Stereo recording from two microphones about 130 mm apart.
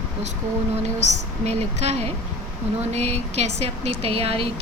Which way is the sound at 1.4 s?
55° right (ahead or behind).